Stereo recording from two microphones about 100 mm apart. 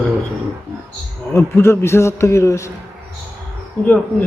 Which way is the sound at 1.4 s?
25° left (ahead or behind).